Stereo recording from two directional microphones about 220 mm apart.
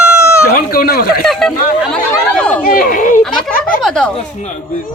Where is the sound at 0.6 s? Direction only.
45° left (ahead or behind).